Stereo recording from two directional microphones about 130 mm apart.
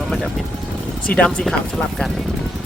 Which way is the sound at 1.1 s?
5° left (ahead or behind).